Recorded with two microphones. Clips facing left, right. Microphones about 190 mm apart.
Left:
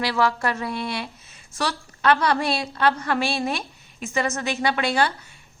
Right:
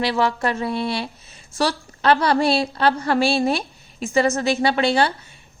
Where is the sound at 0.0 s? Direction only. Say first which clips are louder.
Right 2 dB; 25° right (ahead or behind).